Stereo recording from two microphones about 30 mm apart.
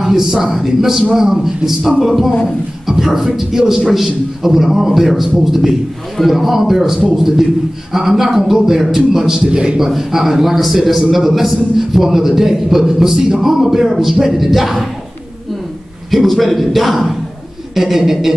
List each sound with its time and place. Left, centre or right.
0.0 s a man's voice: centre
2.9 s a man's voice: centre
9.5 s a man's voice: right
9.8 s a man's voice: centre
16.1 s a man's voice: centre